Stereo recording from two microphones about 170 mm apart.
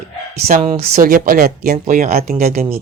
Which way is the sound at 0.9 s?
55° right (ahead or behind).